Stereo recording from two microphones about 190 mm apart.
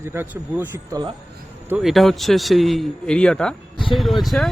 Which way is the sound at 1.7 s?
Centre (ahead or behind).